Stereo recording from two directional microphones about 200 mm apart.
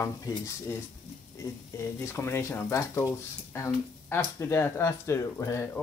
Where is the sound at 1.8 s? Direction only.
10° left (ahead or behind).